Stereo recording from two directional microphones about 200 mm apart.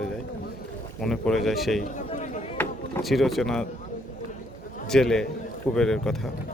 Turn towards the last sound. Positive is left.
turn(degrees=5)  # may be behind; listen again after turning